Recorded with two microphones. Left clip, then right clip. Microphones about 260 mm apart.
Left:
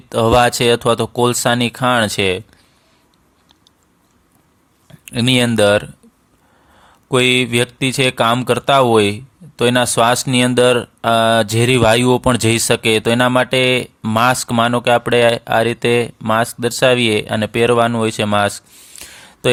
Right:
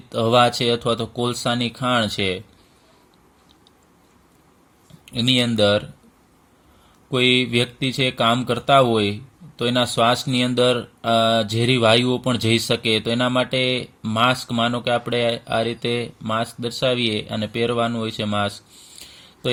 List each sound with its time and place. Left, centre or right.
0.1 s speech: left
5.0 s speech: left
7.1 s speech: left
18.8 s a sound: left